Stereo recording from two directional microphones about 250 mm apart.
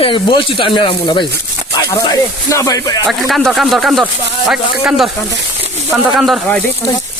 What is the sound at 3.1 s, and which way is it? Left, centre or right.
Speech, centre.